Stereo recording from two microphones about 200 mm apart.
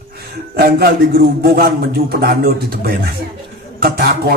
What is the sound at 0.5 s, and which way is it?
A man's voice, 50° right (ahead or behind).